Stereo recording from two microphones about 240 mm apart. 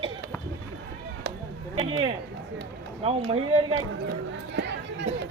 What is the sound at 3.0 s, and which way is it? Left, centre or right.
Speech, right.